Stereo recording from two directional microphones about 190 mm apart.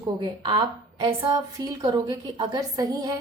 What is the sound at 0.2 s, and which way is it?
A woman's voice, 25° right (ahead or behind).